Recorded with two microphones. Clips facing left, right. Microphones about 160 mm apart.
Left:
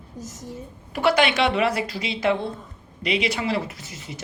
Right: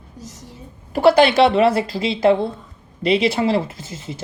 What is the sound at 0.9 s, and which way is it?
Speech, 30° right (ahead or behind).